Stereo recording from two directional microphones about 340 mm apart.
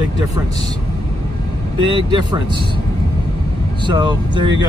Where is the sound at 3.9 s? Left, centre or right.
Centre.